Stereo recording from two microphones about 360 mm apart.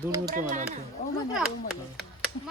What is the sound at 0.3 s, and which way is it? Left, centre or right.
Speech, right.